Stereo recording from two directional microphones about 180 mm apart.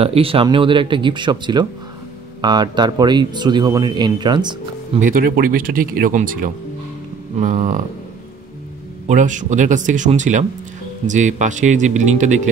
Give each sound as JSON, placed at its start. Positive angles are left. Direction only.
{"t": 0.0, "sound": "speech", "side_deg": -30}
{"t": 4.9, "sound": "speech", "side_deg": -50}
{"t": 9.0, "sound": "speech", "side_deg": -45}